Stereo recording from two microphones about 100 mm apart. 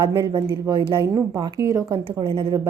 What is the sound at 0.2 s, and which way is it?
Speech, 45° right (ahead or behind).